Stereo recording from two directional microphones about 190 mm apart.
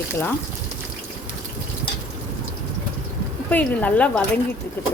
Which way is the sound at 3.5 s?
10° left (ahead or behind).